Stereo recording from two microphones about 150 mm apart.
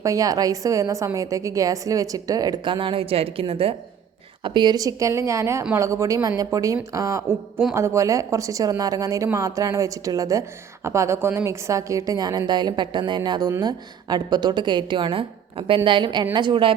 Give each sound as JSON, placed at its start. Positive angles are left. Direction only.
{"t": 0.0, "sound": "a woman's voice", "side_deg": -20}